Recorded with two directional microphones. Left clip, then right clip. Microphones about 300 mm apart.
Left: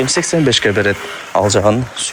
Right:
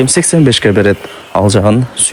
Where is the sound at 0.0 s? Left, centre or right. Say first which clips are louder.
Right 4 dB; right.